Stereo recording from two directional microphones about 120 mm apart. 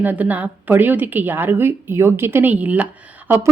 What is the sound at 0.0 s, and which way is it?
A woman's voice, 15° right (ahead or behind).